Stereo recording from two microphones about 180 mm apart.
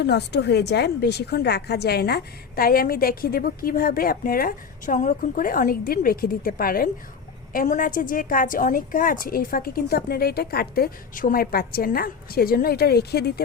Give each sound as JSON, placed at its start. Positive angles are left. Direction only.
{"t": 0.0, "sound": "a woman's voice", "side_deg": 70}